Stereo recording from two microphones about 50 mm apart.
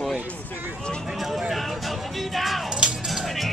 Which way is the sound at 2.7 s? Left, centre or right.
Centre.